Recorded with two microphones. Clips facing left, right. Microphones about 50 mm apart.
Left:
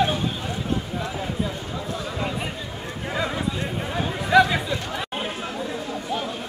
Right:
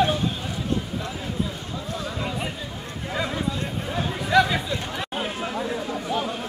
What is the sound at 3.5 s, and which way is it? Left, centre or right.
Chatter, left.